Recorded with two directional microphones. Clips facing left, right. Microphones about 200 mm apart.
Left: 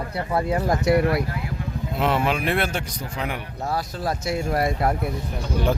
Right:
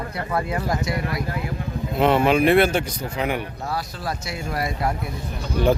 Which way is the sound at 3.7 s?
45° left (ahead or behind).